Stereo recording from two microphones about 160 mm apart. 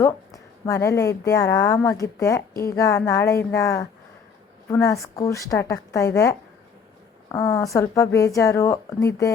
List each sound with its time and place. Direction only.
0.0 s a woman's voice: 20° left (ahead or behind)